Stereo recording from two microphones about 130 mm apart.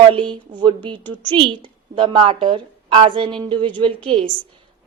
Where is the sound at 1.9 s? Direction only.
40° right (ahead or behind).